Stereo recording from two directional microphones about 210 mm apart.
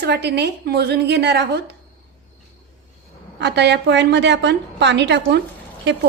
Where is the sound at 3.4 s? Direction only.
55° right (ahead or behind).